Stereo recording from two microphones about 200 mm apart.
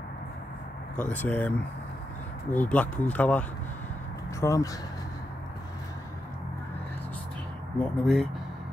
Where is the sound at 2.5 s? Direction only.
10° left (ahead or behind).